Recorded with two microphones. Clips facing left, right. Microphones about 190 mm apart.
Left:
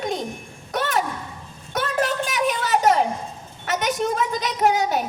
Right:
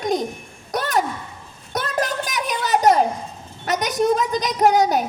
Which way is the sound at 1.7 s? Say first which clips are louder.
Left 1 dB; 40° right (ahead or behind).